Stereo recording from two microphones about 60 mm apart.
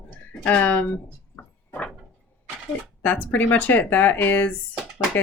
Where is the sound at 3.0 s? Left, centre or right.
Left.